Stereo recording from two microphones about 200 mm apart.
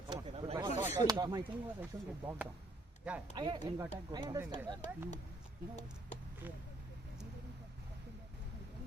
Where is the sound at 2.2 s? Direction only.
10° right (ahead or behind).